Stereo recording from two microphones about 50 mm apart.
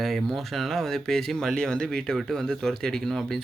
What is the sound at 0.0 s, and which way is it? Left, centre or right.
Speech, centre.